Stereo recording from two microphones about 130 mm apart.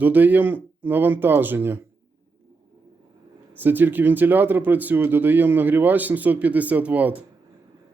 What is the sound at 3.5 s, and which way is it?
Speech, 15° right (ahead or behind).